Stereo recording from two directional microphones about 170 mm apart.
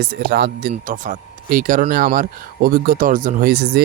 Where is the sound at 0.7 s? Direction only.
50° right (ahead or behind).